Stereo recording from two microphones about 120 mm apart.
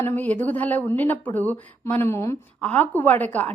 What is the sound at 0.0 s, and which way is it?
A woman's voice, 15° left (ahead or behind).